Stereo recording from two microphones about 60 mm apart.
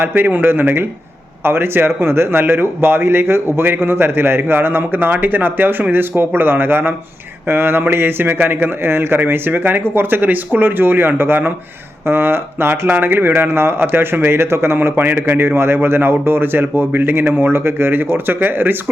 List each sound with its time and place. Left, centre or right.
0.0 s a man's voice: right